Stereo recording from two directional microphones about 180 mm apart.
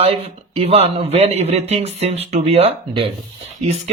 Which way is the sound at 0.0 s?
35° right (ahead or behind).